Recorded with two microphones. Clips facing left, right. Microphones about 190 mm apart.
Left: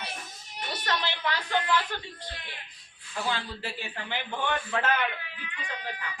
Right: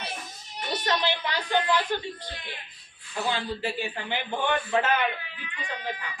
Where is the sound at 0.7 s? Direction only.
20° right (ahead or behind).